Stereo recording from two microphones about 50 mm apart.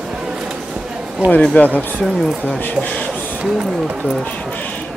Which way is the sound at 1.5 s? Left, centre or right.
Left.